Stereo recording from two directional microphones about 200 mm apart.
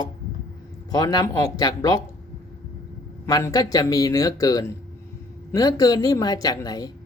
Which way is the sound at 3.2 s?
15° left (ahead or behind).